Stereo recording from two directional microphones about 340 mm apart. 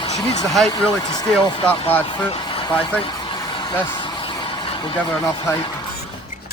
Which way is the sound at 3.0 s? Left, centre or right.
Centre.